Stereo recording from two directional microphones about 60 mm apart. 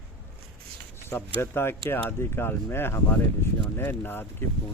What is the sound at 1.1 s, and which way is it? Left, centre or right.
Speech, left.